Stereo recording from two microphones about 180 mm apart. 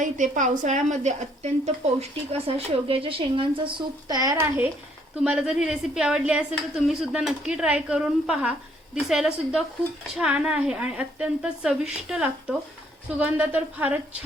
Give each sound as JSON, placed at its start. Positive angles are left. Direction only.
{"t": 0.0, "sound": "a woman's voice", "side_deg": -45}